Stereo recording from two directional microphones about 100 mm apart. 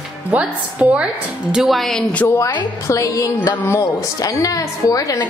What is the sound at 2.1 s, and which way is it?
A woman's voice, 25° left (ahead or behind).